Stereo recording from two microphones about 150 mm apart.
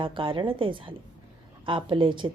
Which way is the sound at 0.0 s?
35° right (ahead or behind).